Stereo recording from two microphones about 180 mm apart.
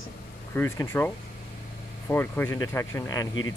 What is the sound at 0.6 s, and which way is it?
Speech, 15° left (ahead or behind).